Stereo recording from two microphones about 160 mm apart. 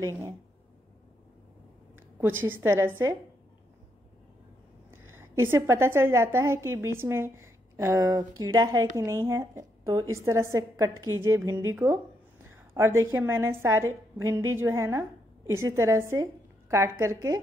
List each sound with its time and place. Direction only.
0.0 s a woman's voice: 15° right (ahead or behind)
2.0 s a woman's voice: 15° right (ahead or behind)
4.9 s a woman's voice: 15° right (ahead or behind)